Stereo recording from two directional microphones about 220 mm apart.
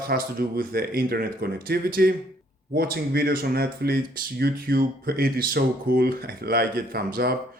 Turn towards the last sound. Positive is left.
turn(degrees=-45)  # may be behind; listen again after turning